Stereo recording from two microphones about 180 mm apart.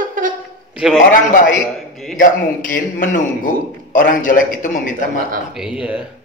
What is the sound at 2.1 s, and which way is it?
Speech, 45° left (ahead or behind).